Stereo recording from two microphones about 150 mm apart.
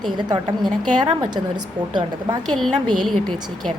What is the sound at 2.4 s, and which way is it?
Speech, centre (ahead or behind).